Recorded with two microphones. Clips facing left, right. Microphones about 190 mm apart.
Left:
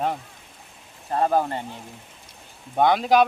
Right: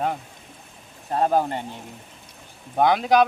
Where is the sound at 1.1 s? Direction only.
10° right (ahead or behind).